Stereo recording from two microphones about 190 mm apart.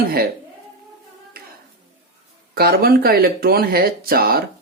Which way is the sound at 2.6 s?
55° right (ahead or behind).